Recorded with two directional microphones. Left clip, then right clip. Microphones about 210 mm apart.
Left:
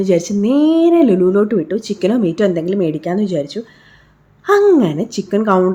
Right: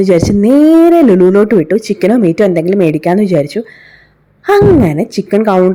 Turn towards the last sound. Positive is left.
turn(degrees=-30)  # may be behind; listen again after turning